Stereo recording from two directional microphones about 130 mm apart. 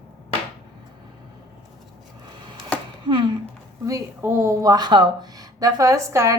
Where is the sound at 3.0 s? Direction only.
40° right (ahead or behind).